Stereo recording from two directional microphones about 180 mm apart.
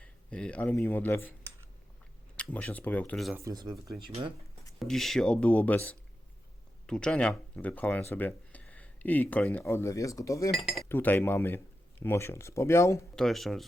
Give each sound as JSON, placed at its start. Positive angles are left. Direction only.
{"t": 0.0, "sound": "speech", "side_deg": 5}
{"t": 2.3, "sound": "speech", "side_deg": 5}
{"t": 3.3, "sound": "speech", "side_deg": -20}
{"t": 4.8, "sound": "speech", "side_deg": 0}
{"t": 10.5, "sound": "speech", "side_deg": 0}
{"t": 10.8, "sound": "speech", "side_deg": 10}
{"t": 13.1, "sound": "speech", "side_deg": 0}